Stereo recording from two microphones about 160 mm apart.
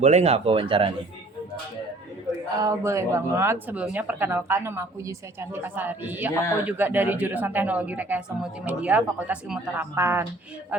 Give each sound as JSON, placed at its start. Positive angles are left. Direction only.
{"t": 0.0, "sound": "speech", "side_deg": -45}
{"t": 2.6, "sound": "a woman's voice", "side_deg": -20}